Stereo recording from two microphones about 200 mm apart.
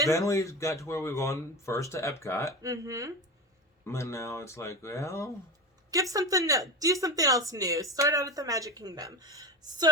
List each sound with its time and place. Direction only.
0.1 s speech: 15° left (ahead or behind)
2.6 s speech: 15° right (ahead or behind)
3.8 s speech: 15° left (ahead or behind)
5.9 s speech: 15° right (ahead or behind)